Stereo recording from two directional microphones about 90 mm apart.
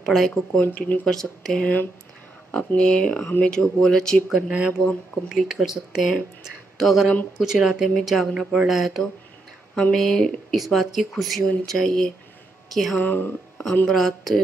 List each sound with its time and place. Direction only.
0.0 s speech: centre (ahead or behind)
0.6 s speech: 20° left (ahead or behind)
1.0 s speech: 5° left (ahead or behind)
4.3 s speech: 10° right (ahead or behind)
13.0 s speech: 20° left (ahead or behind)
13.8 s speech: centre (ahead or behind)